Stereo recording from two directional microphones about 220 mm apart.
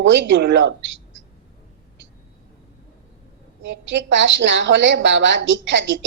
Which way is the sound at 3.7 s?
55° right (ahead or behind).